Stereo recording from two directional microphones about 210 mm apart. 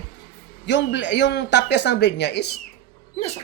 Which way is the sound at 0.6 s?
55° left (ahead or behind).